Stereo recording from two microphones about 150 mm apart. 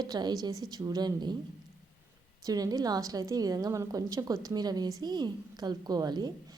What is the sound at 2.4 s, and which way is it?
A woman's voice, 25° right (ahead or behind).